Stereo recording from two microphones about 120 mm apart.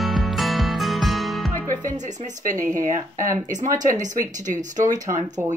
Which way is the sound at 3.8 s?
90° right.